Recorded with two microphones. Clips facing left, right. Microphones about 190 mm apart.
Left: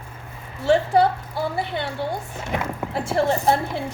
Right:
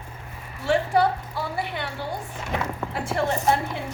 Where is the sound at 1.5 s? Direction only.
25° left (ahead or behind).